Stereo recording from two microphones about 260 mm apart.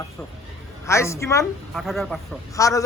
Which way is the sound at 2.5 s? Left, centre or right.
Centre.